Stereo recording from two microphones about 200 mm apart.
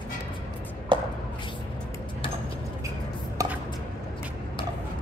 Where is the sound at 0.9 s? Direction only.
25° right (ahead or behind).